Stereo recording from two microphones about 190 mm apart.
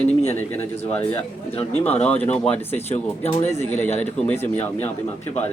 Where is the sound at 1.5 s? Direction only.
35° left (ahead or behind).